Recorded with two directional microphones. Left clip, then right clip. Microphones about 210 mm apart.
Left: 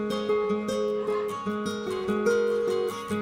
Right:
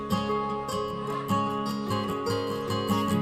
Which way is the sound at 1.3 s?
55° right (ahead or behind).